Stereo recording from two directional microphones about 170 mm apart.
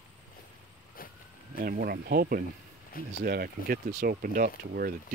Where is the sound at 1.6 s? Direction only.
60° right (ahead or behind).